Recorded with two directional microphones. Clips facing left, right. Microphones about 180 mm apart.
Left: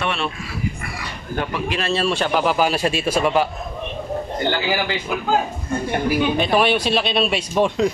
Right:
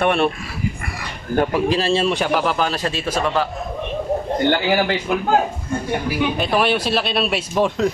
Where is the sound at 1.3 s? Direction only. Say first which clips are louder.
Right 7 dB; 40° right (ahead or behind); by 2.3 s 20° right (ahead or behind).